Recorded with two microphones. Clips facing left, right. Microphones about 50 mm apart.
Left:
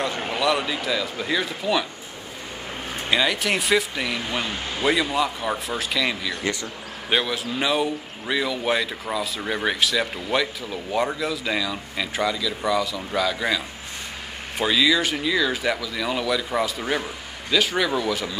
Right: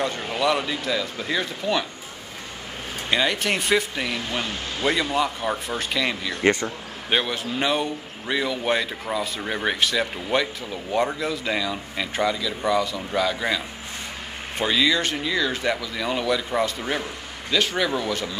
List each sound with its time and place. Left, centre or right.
0.1 s speech: centre
0.4 s speech: centre
3.1 s speech: centre
6.4 s speech: right
7.1 s speech: centre
14.6 s speech: centre